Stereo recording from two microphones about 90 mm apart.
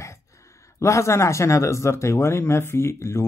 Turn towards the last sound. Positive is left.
turn(degrees=30)  # may be behind; listen again after turning